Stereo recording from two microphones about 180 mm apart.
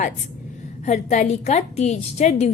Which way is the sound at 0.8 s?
40° left (ahead or behind).